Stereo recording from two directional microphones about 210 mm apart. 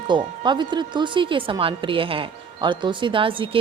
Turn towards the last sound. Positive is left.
turn(degrees=-25)  # may be behind; listen again after turning